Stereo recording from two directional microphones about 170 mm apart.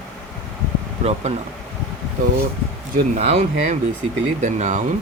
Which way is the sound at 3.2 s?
40° right (ahead or behind).